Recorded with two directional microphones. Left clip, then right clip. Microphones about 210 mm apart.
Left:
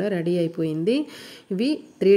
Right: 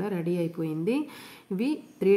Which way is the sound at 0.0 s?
15° left (ahead or behind).